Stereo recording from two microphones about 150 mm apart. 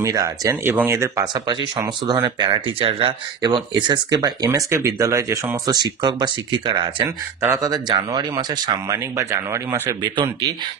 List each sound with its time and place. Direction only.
0.0 s speech: 25° right (ahead or behind)